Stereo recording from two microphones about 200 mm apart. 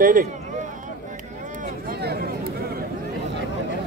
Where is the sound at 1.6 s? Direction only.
50° right (ahead or behind).